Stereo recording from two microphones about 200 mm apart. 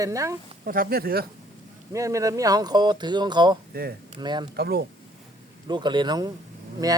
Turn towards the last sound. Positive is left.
turn(degrees=-20)  # may be behind; listen again after turning